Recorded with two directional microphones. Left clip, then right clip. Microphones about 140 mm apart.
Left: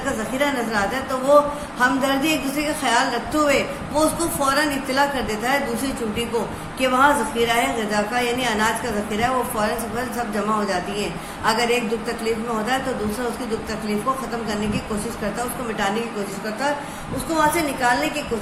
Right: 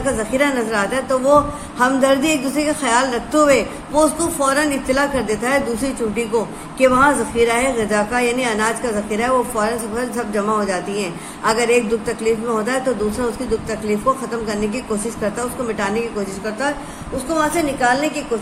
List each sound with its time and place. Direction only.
0.3 s a man's voice: 45° right (ahead or behind)
17.3 s a woman's voice: 25° right (ahead or behind)